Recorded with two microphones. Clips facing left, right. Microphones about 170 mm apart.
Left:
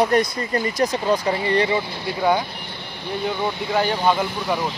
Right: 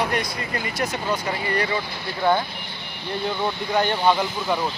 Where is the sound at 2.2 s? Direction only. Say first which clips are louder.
Left 1 dB; 15° left (ahead or behind).